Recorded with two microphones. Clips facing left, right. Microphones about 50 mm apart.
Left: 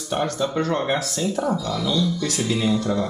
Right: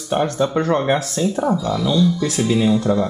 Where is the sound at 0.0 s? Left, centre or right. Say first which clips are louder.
Right 5 dB; centre.